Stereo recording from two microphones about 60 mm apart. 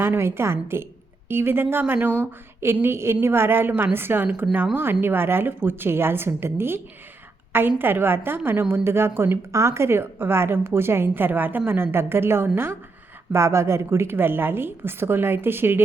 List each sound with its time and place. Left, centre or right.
0.0 s a woman's voice: right
7.8 s a woman's voice: right
9.5 s a woman's voice: right